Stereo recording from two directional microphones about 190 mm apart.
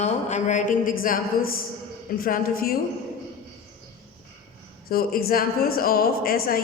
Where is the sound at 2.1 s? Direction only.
50° left (ahead or behind).